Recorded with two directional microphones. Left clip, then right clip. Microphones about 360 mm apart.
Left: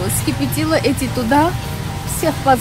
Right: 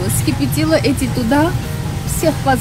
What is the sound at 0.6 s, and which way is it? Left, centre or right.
Speech, centre.